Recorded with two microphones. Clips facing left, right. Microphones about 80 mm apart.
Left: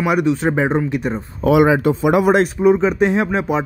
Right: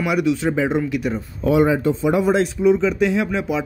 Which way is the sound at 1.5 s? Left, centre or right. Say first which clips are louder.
Left 3 dB; left.